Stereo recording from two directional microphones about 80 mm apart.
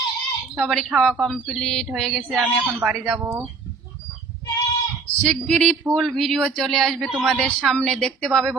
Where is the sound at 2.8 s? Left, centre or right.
Centre.